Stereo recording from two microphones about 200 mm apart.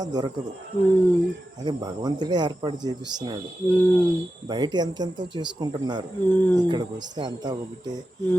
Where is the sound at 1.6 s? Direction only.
20° right (ahead or behind).